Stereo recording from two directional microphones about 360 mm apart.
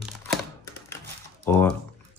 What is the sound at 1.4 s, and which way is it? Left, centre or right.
Speech, centre.